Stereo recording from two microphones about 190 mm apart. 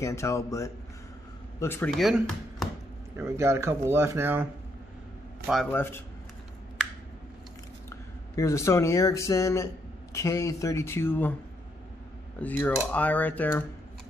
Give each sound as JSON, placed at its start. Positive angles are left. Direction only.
{"t": 0.0, "sound": "speech", "side_deg": 15}
{"t": 1.9, "sound": "speech", "side_deg": 0}
{"t": 3.2, "sound": "speech", "side_deg": -15}
{"t": 5.5, "sound": "speech", "side_deg": 5}
{"t": 7.9, "sound": "speech", "side_deg": 15}
{"t": 12.4, "sound": "speech", "side_deg": 10}